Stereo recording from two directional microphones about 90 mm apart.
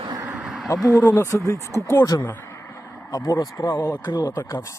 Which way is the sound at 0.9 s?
25° left (ahead or behind).